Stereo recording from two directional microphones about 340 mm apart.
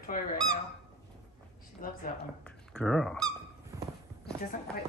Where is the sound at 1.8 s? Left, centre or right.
Left.